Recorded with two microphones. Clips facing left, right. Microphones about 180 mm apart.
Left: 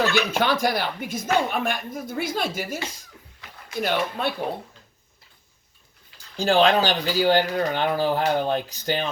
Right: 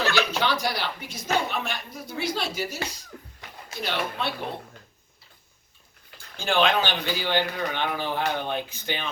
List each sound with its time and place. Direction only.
0.1 s speech: 50° left (ahead or behind)
3.8 s speech: 50° left (ahead or behind)
6.1 s speech: 40° left (ahead or behind)